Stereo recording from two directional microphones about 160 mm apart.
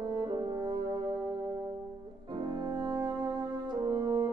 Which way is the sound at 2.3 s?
30° right (ahead or behind).